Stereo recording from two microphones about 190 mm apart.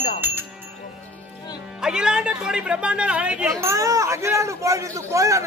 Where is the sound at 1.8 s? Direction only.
5° right (ahead or behind).